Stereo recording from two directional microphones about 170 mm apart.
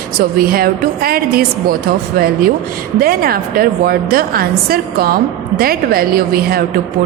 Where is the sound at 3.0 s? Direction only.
60° right (ahead or behind).